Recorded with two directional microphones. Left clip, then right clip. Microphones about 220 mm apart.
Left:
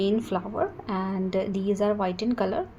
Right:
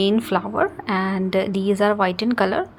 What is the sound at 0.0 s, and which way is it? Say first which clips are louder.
A woman's voice: right 6 dB; 20° right (ahead or behind).